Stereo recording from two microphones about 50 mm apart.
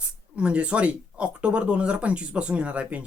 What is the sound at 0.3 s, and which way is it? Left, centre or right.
Speech, right.